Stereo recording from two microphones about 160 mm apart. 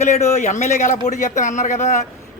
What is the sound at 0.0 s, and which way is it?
Speech, 45° left (ahead or behind).